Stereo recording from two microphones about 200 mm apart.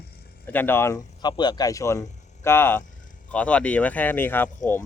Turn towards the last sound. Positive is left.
turn(degrees=10)  # may be behind; listen again after turning